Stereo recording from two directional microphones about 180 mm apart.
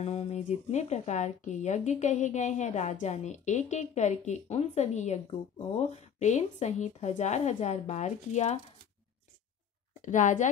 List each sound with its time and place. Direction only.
0.0 s speech: 35° left (ahead or behind)
10.0 s a woman's voice: 45° left (ahead or behind)